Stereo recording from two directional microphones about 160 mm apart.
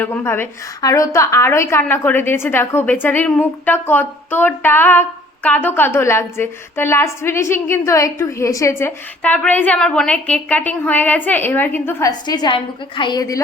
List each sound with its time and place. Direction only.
0.0 s a woman's voice: 10° left (ahead or behind)
9.2 s a woman's voice: 10° left (ahead or behind)
12.2 s a woman's voice: 25° left (ahead or behind)